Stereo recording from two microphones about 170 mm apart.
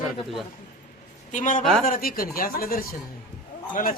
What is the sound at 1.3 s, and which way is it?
A man's voice, 50° left (ahead or behind).